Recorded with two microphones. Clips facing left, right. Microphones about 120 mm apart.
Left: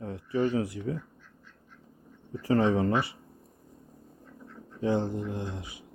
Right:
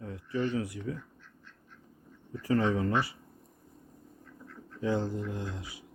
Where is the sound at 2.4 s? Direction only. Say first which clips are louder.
Left 3 dB; 30° left (ahead or behind).